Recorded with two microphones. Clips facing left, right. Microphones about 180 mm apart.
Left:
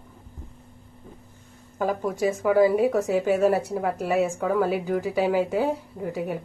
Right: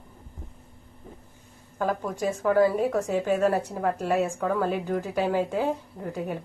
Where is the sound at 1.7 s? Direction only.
10° left (ahead or behind).